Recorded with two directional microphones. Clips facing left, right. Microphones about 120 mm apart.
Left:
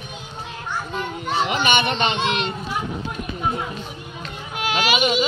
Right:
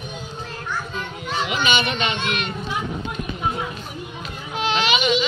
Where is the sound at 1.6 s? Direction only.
55° left (ahead or behind).